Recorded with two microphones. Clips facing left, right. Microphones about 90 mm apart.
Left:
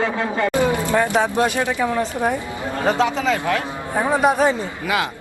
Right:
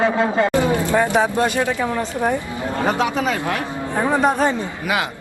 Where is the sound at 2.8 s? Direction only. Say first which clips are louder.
Left 2 dB; 15° right (ahead or behind).